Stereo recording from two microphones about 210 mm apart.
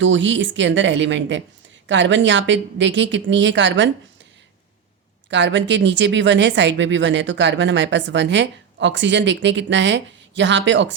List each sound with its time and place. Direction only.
0.0 s speech: 60° right (ahead or behind)
5.3 s speech: 60° right (ahead or behind)